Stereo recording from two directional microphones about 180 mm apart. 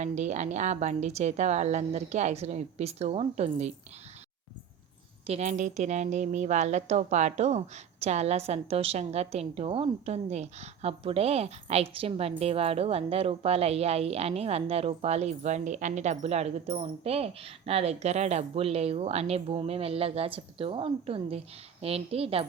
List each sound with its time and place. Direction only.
0.0 s a woman's voice: 40° right (ahead or behind)
5.2 s a woman's voice: 35° right (ahead or behind)